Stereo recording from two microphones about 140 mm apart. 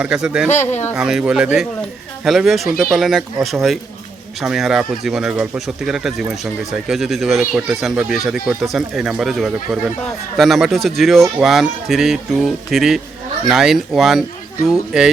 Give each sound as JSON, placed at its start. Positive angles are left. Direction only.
{"t": 0.0, "sound": "speech", "side_deg": -5}
{"t": 0.5, "sound": "speech", "side_deg": 55}
{"t": 0.9, "sound": "speech", "side_deg": -5}